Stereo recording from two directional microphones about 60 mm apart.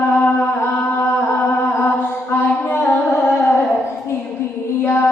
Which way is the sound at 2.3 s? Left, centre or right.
Left.